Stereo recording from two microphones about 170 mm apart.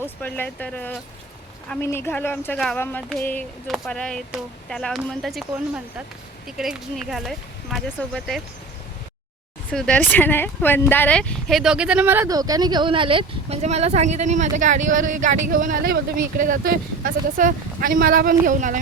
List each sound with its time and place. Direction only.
0.2 s speech: 10° left (ahead or behind)
9.6 s speech: 5° left (ahead or behind); by 18.8 s 50° right (ahead or behind)